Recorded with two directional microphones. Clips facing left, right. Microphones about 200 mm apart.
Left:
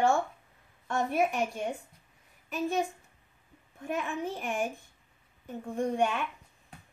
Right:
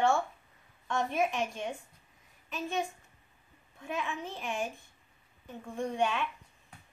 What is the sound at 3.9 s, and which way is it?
Speech, 50° left (ahead or behind).